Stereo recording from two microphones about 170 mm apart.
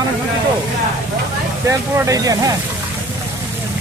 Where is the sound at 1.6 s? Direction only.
20° right (ahead or behind).